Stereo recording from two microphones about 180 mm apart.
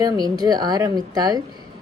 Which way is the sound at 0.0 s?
20° right (ahead or behind).